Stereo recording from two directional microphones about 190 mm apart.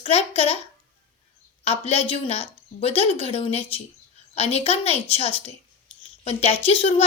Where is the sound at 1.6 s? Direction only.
30° left (ahead or behind).